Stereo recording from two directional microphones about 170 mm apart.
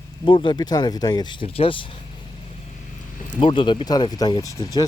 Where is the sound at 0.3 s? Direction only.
30° left (ahead or behind).